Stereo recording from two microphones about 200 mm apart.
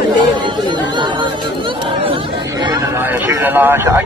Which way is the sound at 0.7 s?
25° right (ahead or behind).